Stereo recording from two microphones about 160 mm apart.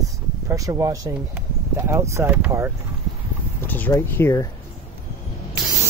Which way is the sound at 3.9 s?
15° left (ahead or behind).